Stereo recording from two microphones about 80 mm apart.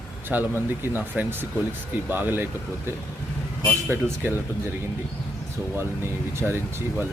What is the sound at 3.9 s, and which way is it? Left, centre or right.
Speech, right.